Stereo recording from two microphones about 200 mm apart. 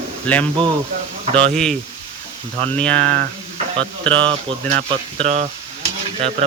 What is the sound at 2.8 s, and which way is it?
Speech, 5° left (ahead or behind).